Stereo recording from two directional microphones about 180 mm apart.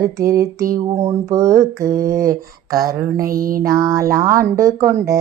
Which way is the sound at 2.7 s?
20° right (ahead or behind).